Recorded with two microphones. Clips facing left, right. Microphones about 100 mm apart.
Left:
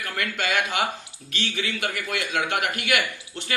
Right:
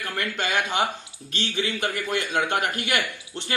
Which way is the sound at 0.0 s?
25° right (ahead or behind).